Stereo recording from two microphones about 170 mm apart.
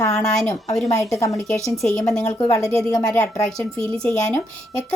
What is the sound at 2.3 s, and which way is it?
Speech, 20° left (ahead or behind).